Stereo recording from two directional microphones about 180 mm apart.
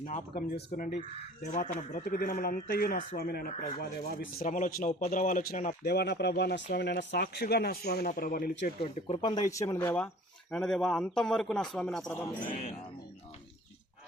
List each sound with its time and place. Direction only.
0.0 s speech: 50° left (ahead or behind)
1.5 s speech: 45° left (ahead or behind)
4.4 s speech: 45° left (ahead or behind)
8.8 s speech: 35° left (ahead or behind); by 12.1 s centre (ahead or behind)